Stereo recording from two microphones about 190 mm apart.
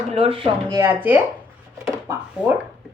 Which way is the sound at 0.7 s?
15° right (ahead or behind).